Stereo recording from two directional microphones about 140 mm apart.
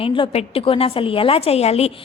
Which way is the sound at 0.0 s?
40° left (ahead or behind).